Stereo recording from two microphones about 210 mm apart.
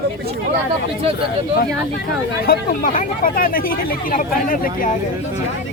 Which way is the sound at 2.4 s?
45° left (ahead or behind).